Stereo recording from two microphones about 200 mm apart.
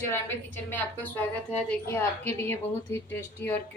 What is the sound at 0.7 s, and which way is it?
A woman's voice, 10° left (ahead or behind).